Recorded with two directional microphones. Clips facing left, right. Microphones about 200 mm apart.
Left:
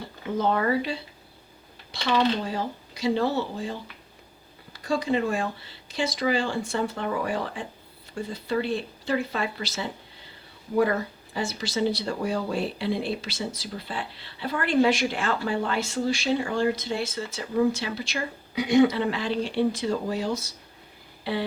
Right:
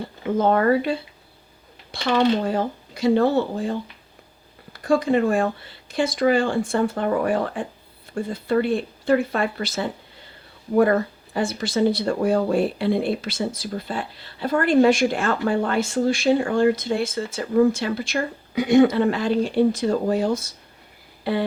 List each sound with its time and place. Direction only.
0.3 s speech: 50° right (ahead or behind)